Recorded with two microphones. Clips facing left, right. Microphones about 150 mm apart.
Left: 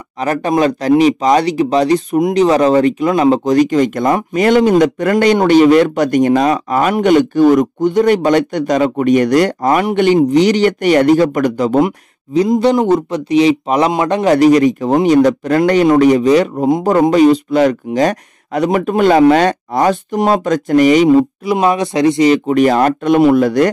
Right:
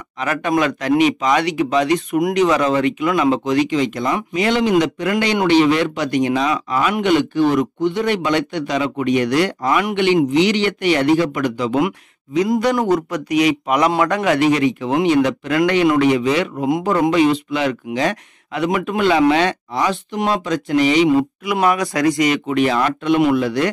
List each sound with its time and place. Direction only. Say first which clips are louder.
0.2 s speech: left 5 dB; 35° left (ahead or behind)
12.4 s speech: left 5 dB; 25° left (ahead or behind); by 21.1 s 45° left (ahead or behind)
21.5 s speech: left 4 dB; 25° left (ahead or behind); by 23.7 s 45° left (ahead or behind)